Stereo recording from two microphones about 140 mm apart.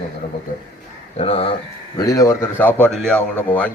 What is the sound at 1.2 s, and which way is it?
Speech, 45° left (ahead or behind).